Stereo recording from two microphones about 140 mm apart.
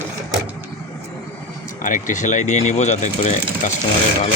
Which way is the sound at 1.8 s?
65° left (ahead or behind).